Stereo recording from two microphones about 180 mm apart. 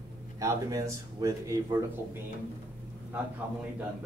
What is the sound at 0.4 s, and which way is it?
Speech, 20° right (ahead or behind).